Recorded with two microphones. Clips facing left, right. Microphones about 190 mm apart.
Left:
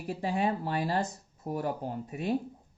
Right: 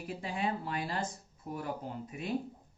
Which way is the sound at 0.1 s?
40° left (ahead or behind).